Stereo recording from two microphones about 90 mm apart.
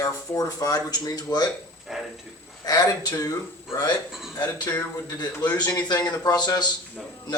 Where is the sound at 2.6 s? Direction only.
45° left (ahead or behind).